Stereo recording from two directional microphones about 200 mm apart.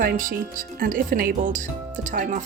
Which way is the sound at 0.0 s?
45° right (ahead or behind).